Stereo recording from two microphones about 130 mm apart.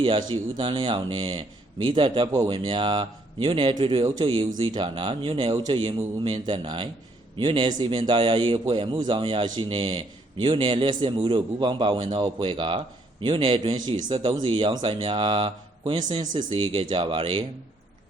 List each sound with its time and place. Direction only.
0.0 s speech: 35° right (ahead or behind)